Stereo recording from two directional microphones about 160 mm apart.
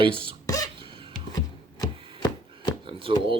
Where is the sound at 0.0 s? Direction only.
35° right (ahead or behind).